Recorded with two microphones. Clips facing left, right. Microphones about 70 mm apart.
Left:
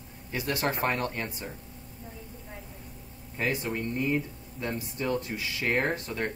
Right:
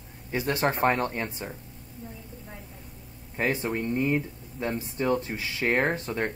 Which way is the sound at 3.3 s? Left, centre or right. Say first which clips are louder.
Right 3 dB; right.